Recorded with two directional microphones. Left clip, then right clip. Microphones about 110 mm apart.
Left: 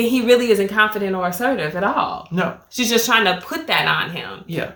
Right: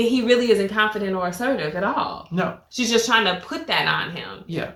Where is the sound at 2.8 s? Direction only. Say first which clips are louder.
Left 2 dB; 40° left (ahead or behind).